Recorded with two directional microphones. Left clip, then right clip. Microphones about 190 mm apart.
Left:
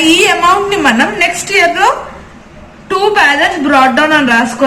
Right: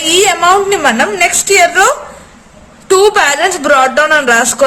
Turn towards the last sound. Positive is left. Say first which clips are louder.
# right 1 dB
turn(degrees=-65)  # may be behind; listen again after turning